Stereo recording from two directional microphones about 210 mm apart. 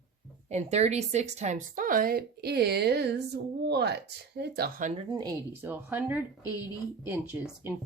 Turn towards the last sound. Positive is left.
turn(degrees=-10)  # may be behind; listen again after turning